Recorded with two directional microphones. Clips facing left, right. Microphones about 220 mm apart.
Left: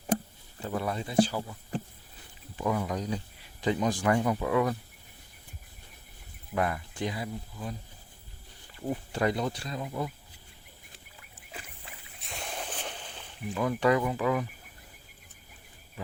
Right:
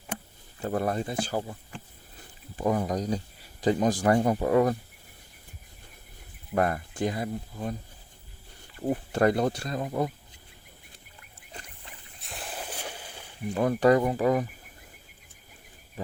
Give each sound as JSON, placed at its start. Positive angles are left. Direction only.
{"t": 0.6, "sound": "speech", "side_deg": -45}
{"t": 2.6, "sound": "speech", "side_deg": -40}
{"t": 6.5, "sound": "speech", "side_deg": -45}
{"t": 8.9, "sound": "speech", "side_deg": -50}
{"t": 12.2, "sound": "a sound", "side_deg": 0}
{"t": 13.5, "sound": "speech", "side_deg": -40}